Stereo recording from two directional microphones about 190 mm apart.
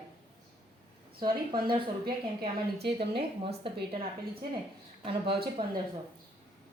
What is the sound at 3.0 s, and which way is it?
Speech, 30° right (ahead or behind).